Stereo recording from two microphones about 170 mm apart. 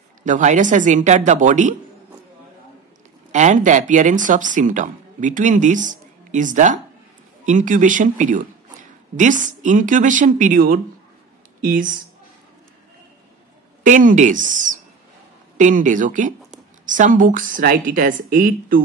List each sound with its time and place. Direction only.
0.2 s a woman's voice: 45° right (ahead or behind)
3.3 s a woman's voice: 45° right (ahead or behind)
13.8 s a woman's voice: 50° right (ahead or behind)